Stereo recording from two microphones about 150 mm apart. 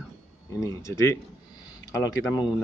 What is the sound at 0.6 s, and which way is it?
Speech, 20° left (ahead or behind).